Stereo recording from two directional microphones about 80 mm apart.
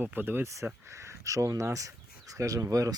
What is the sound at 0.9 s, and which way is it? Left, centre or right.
Speech, right.